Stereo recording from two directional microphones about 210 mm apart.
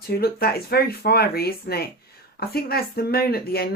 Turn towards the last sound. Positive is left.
turn(degrees=45)  # may be behind; listen again after turning